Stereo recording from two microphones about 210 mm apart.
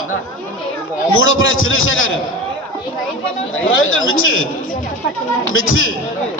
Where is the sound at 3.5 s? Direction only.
75° left (ahead or behind).